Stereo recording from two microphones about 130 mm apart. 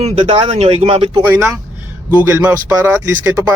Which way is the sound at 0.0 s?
55° right (ahead or behind).